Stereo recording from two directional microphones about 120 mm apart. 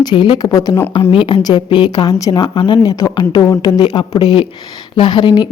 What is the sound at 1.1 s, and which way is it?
Speech, 45° left (ahead or behind).